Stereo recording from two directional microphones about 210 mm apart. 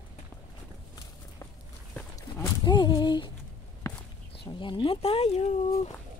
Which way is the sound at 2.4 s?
20° left (ahead or behind).